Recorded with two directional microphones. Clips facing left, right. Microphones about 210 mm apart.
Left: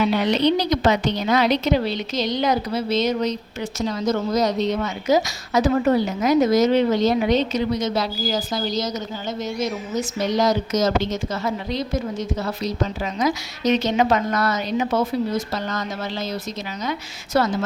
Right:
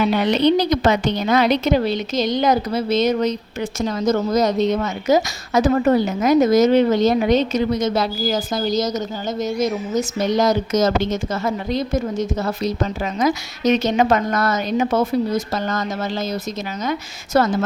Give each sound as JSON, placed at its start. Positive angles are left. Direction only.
{"t": 0.0, "sound": "a woman's voice", "side_deg": -50}
{"t": 17.3, "sound": "a woman's voice", "side_deg": -50}